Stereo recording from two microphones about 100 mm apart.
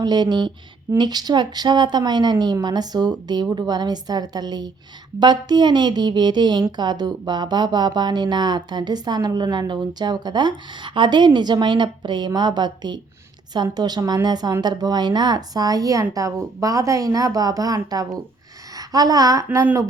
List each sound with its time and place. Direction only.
0.0 s a woman's voice: 45° right (ahead or behind)
18.8 s a woman's voice: 40° right (ahead or behind)